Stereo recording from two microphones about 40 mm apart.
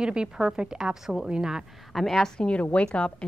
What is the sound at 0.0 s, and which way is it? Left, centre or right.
A woman's voice, right.